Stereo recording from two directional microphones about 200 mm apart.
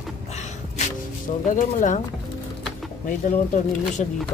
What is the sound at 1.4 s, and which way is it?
Speech, 40° left (ahead or behind).